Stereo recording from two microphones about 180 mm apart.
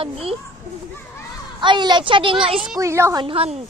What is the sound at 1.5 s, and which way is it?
Speech, 25° right (ahead or behind).